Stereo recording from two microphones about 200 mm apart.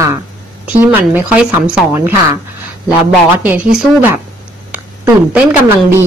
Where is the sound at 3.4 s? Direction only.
5° right (ahead or behind).